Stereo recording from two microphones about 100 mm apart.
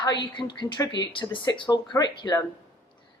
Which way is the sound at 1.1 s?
55° left (ahead or behind).